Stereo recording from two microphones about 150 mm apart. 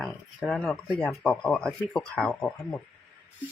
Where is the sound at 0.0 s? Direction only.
5° left (ahead or behind).